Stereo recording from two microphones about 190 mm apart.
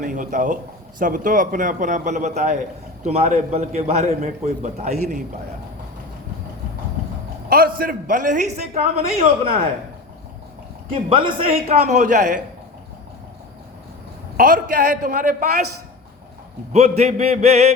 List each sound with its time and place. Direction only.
0.0 s a man's voice: 40° right (ahead or behind)
7.5 s a man's voice: 50° right (ahead or behind); by 9.6 s 30° right (ahead or behind)
11.1 s speech: 25° right (ahead or behind)
11.9 s a man's voice: 40° right (ahead or behind)
14.3 s a man's voice: 45° right (ahead or behind)
16.7 s a man's voice: 35° right (ahead or behind)